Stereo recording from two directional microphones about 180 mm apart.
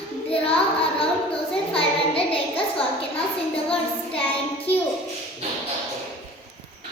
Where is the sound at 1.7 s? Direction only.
30° left (ahead or behind).